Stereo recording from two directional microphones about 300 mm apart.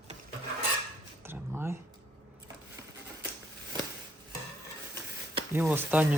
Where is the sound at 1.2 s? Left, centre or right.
Centre.